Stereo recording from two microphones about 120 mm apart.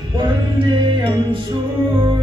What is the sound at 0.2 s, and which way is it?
Music, 45° right (ahead or behind).